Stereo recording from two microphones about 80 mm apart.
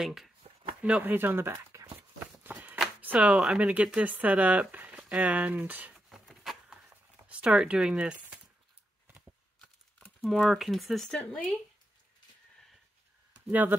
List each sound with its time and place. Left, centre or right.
0.0 s speech: centre
0.8 s speech: centre
1.1 s speech: right
2.0 s walk: right
3.0 s speech: centre
5.9 s a sound: centre
7.2 s speech: centre
9.0 s a sound: right
10.2 s speech: centre
11.1 s speech: centre
13.5 s speech: right